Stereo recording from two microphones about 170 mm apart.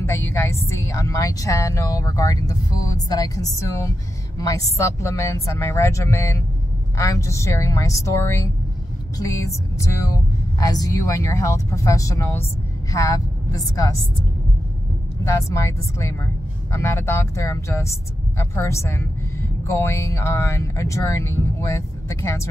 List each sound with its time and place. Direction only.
0.0 s a woman's voice: 15° left (ahead or behind)
9.8 s a woman's voice: 20° left (ahead or behind)
15.2 s speech: 20° left (ahead or behind)